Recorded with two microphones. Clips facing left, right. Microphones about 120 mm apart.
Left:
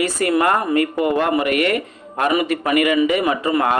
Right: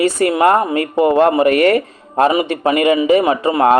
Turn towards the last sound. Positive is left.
turn(degrees=-30)  # may be behind; listen again after turning